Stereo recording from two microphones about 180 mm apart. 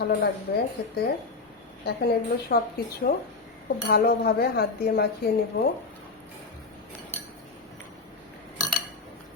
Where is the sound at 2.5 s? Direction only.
55° left (ahead or behind).